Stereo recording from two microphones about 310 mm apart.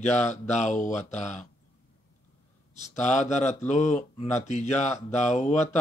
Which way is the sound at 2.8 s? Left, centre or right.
Left.